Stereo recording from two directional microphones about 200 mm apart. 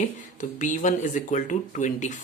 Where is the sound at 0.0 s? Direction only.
40° left (ahead or behind).